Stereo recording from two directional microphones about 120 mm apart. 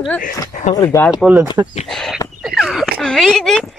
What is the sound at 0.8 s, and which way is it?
Speech, 15° left (ahead or behind).